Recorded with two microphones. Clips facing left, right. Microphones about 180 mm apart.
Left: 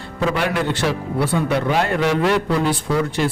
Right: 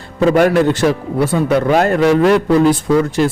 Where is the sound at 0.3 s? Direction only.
45° right (ahead or behind).